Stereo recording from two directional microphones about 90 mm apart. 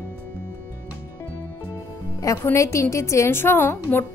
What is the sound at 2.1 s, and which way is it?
A woman's voice, 35° left (ahead or behind).